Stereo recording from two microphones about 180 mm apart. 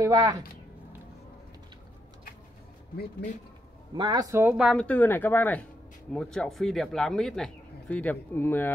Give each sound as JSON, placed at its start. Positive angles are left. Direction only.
{"t": 0.0, "sound": "a woman's voice", "side_deg": -20}
{"t": 3.9, "sound": "speech", "side_deg": -25}
{"t": 4.8, "sound": "speech", "side_deg": 10}